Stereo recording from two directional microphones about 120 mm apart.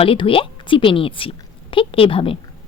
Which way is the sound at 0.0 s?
50° left (ahead or behind).